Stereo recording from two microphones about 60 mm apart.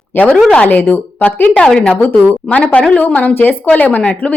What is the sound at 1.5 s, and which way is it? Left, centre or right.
Speech, centre.